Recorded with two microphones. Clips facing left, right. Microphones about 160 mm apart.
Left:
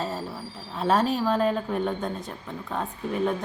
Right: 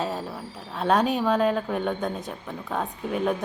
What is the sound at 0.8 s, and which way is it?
A woman's voice, centre (ahead or behind).